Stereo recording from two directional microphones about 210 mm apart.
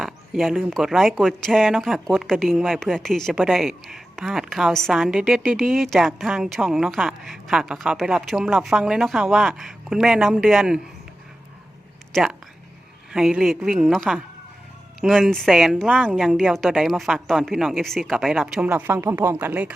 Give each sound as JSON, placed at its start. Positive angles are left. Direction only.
{"t": 0.0, "sound": "speech", "side_deg": 0}
{"t": 12.1, "sound": "speech", "side_deg": 0}